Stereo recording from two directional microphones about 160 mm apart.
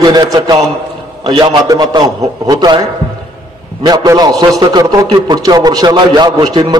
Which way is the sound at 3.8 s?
25° right (ahead or behind).